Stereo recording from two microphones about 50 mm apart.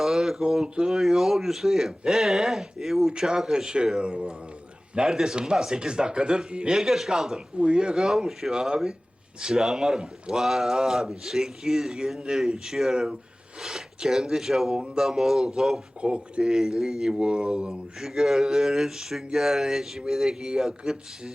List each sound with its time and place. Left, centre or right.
0.0 s speech: centre
4.9 s speech: centre
6.7 s speech: centre
16.0 s speech: centre
18.0 s speech: centre